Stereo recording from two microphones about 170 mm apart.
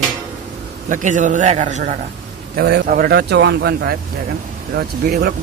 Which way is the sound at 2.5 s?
65° right (ahead or behind).